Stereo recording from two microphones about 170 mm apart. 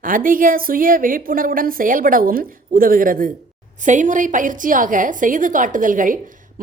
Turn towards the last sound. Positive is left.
turn(degrees=-50)  # may be behind; listen again after turning